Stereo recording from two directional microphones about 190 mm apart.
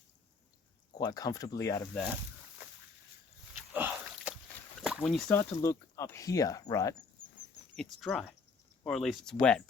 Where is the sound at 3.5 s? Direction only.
10° right (ahead or behind).